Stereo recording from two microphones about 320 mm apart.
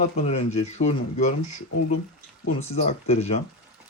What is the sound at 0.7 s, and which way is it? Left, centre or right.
Speech, left.